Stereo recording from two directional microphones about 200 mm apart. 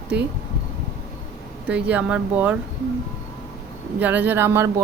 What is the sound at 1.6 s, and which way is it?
Speech, 5° right (ahead or behind).